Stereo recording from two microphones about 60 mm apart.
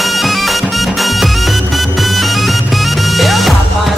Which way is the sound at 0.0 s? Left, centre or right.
Centre.